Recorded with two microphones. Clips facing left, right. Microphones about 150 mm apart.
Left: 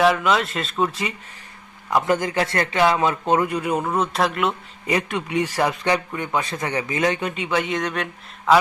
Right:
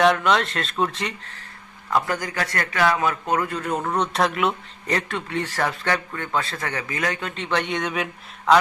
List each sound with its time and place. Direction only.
0.0 s speech: 5° left (ahead or behind)
1.9 s a man's voice: 20° left (ahead or behind); by 4.5 s centre (ahead or behind)
4.9 s a man's voice: 15° left (ahead or behind); by 8.5 s centre (ahead or behind)